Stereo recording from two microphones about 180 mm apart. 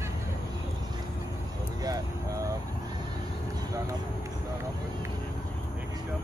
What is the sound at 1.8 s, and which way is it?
Vehicle, 20° right (ahead or behind).